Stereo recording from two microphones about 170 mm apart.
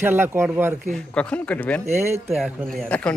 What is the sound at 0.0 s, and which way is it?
Speech, 10° right (ahead or behind).